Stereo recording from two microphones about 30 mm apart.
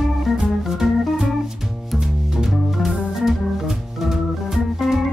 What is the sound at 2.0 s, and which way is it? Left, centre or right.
Music, right.